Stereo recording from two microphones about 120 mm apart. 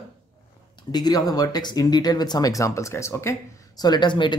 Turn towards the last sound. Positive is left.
turn(degrees=40)  # may be behind; listen again after turning